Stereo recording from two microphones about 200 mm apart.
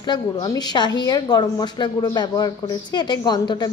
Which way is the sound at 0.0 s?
20° left (ahead or behind).